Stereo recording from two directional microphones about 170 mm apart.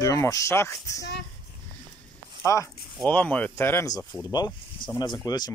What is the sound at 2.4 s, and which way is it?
Speech, 20° left (ahead or behind).